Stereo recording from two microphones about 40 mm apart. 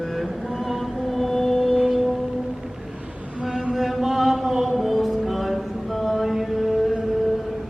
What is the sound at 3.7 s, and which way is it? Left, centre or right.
Chant, centre.